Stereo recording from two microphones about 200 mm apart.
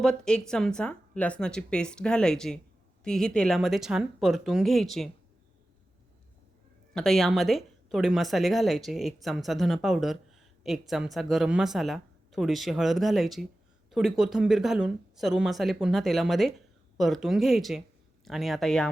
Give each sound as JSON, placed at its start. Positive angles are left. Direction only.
{"t": 0.0, "sound": "speech", "side_deg": 5}
{"t": 6.9, "sound": "speech", "side_deg": 0}